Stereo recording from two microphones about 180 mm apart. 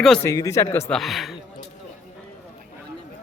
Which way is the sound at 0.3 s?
15° left (ahead or behind).